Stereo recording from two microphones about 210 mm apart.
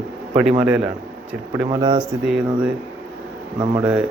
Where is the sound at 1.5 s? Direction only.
15° right (ahead or behind).